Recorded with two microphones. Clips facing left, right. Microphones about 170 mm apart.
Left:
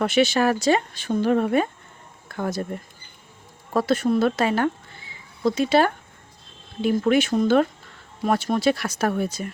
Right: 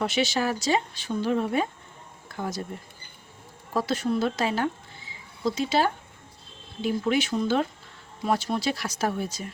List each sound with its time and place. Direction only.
0.0 s speech: 55° left (ahead or behind)
3.7 s speech: 55° left (ahead or behind)